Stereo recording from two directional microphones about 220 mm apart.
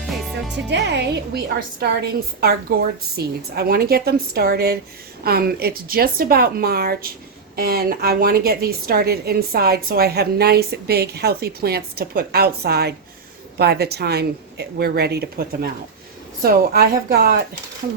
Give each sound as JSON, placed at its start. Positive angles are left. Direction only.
{"t": 0.1, "sound": "music", "side_deg": 0}
{"t": 0.5, "sound": "a woman's voice", "side_deg": -50}
{"t": 2.7, "sound": "a woman's voice", "side_deg": -45}